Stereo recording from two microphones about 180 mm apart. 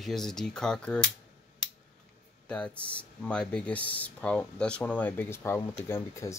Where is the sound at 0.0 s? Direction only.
Centre (ahead or behind).